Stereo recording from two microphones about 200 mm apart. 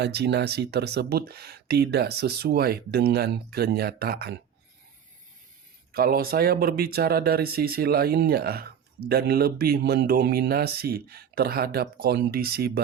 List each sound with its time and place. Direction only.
0.0 s speech: 55° right (ahead or behind)
5.9 s speech: 50° right (ahead or behind)